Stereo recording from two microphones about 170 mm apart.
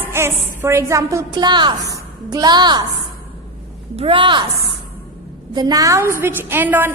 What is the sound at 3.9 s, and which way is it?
Speech, 30° right (ahead or behind).